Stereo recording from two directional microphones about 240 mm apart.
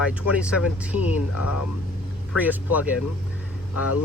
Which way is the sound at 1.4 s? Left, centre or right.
Left.